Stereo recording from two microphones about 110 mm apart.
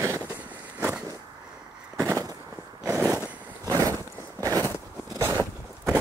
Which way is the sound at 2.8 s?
30° right (ahead or behind).